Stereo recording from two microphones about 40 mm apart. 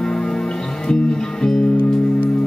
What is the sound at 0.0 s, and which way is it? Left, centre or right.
Music, centre.